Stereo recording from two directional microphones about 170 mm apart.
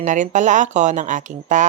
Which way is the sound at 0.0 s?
45° right (ahead or behind).